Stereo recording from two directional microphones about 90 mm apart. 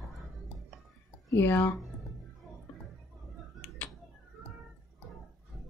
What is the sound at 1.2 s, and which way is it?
Speech, 25° left (ahead or behind).